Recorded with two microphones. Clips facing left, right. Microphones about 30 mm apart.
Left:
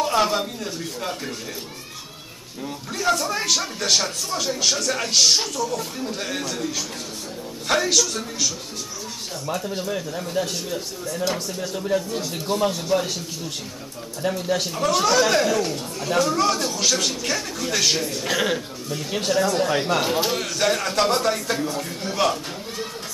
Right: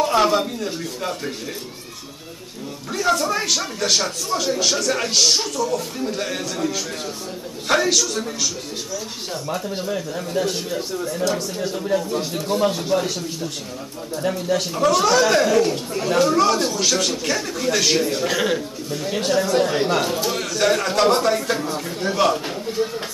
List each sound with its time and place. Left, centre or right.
0.0 s speech: centre
2.9 s speech: centre
9.5 s speech: centre
10.4 s a man's voice: centre
14.2 s speech: centre
15.7 s speech: right
16.1 s speech: centre
20.1 s a man's voice: centre
20.3 s a man's voice: centre